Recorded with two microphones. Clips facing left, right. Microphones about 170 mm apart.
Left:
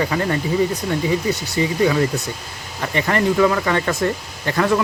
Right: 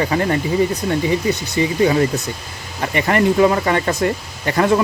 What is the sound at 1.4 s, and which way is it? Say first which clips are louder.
Speech: right 2 dB; 20° right (ahead or behind).